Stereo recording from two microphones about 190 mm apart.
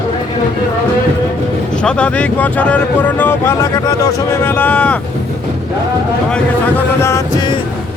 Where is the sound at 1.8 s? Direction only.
5° left (ahead or behind).